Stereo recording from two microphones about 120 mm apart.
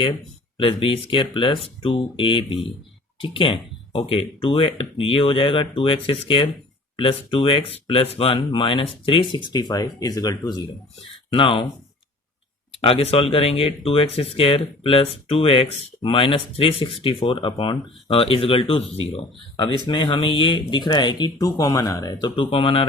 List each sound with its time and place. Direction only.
0.0 s speech: 45° left (ahead or behind)
11.3 s speech: 45° left (ahead or behind)
12.8 s speech: 55° left (ahead or behind)
19.8 s speech: 45° left (ahead or behind)
22.4 s speech: 45° left (ahead or behind)